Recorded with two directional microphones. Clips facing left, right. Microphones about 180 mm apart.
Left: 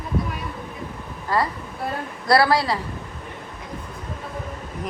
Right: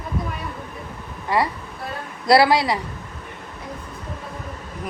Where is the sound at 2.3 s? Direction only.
20° right (ahead or behind).